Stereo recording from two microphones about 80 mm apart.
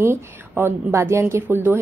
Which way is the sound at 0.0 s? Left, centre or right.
Right.